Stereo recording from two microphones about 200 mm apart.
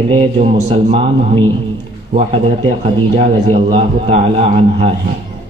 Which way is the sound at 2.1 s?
30° right (ahead or behind).